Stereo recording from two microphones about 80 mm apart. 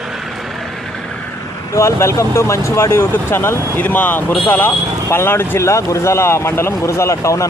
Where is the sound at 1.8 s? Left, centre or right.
Left.